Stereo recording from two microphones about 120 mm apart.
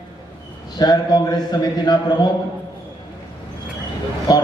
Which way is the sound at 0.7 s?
35° left (ahead or behind).